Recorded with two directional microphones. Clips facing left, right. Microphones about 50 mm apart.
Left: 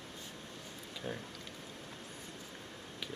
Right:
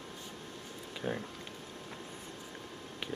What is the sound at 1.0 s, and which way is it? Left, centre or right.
Speech, right.